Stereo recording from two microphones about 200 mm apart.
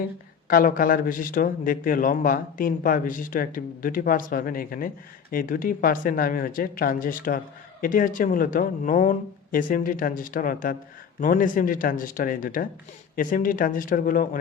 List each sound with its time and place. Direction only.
0.4 s speech: 45° left (ahead or behind)